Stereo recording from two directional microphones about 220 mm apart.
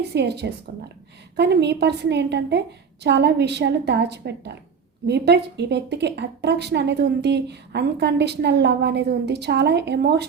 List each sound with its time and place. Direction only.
0.1 s a woman's voice: 50° right (ahead or behind)